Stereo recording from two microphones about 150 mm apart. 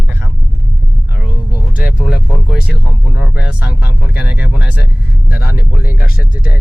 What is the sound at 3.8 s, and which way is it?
Speech, 90° left.